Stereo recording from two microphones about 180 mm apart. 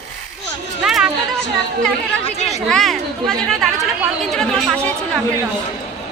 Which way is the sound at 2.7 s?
Centre (ahead or behind).